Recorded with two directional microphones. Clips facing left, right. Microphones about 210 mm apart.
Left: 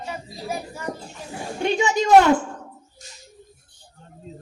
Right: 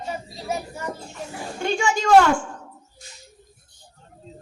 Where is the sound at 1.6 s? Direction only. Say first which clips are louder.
Left 2 dB; 20° left (ahead or behind).